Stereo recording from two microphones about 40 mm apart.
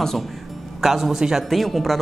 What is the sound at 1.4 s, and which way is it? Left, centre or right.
Speech, centre.